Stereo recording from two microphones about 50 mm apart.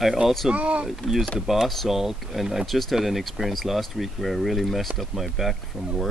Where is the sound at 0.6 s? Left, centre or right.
Right.